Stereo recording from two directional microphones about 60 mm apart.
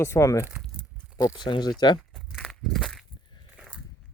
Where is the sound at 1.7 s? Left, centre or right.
Centre.